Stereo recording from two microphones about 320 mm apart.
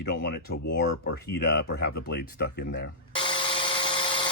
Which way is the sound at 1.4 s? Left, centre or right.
Left.